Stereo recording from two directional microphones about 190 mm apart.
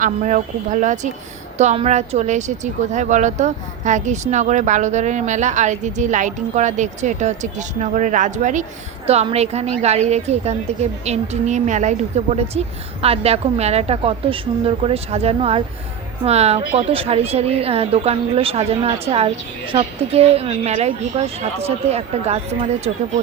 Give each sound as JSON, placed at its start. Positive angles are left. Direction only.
{"t": 0.0, "sound": "a woman's voice", "side_deg": -40}